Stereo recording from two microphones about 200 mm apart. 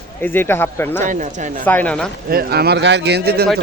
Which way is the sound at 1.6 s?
10° left (ahead or behind).